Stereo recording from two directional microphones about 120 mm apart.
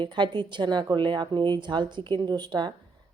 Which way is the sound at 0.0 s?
40° right (ahead or behind).